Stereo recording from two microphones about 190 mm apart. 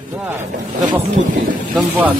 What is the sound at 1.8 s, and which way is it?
Speech, 10° right (ahead or behind).